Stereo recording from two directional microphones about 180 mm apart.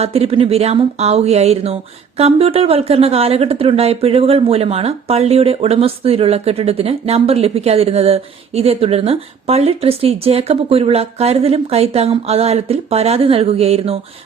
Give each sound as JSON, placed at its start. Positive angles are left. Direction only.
{"t": 0.0, "sound": "speech", "side_deg": -35}